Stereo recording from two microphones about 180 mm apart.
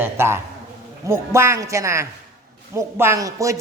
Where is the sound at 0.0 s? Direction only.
15° right (ahead or behind).